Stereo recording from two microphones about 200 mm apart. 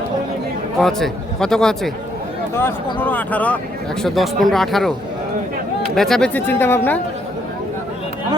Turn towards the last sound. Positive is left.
turn(degrees=10)  # may be behind; listen again after turning